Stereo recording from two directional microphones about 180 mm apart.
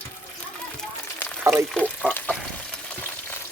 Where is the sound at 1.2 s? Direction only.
15° left (ahead or behind).